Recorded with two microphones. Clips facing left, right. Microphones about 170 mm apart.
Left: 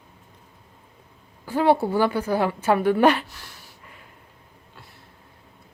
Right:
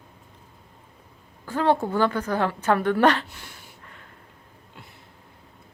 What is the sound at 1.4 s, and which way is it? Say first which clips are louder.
A woman's voice: left 3 dB; 10° left (ahead or behind).